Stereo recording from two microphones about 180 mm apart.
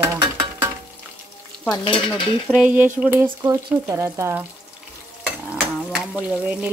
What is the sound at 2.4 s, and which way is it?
Speech, 5° right (ahead or behind).